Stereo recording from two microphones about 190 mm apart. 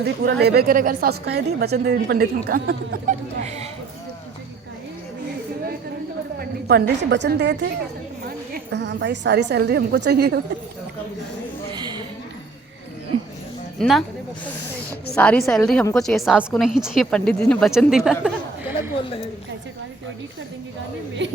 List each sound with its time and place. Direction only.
0.0 s a woman's voice: 60° right (ahead or behind)
6.4 s a woman's voice: 55° right (ahead or behind)
11.7 s a sound: 25° right (ahead or behind)
13.7 s speech: centre (ahead or behind)
15.1 s a woman's voice: 5° left (ahead or behind)
21.2 s speech: 70° right (ahead or behind)